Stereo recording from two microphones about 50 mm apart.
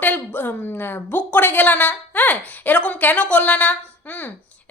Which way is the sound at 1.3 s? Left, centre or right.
Left.